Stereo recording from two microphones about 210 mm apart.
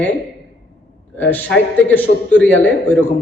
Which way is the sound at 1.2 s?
10° left (ahead or behind).